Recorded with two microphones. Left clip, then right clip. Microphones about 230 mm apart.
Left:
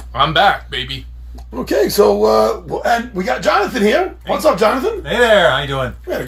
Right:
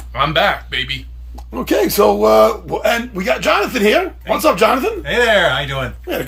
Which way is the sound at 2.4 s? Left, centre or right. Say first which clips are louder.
Right 3 dB; right.